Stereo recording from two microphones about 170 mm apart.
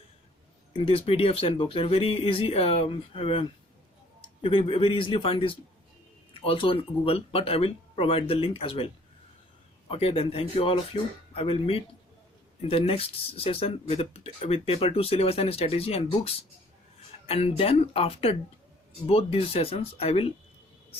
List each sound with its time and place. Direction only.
0.7 s speech: 35° left (ahead or behind)
9.9 s speech: 35° left (ahead or behind)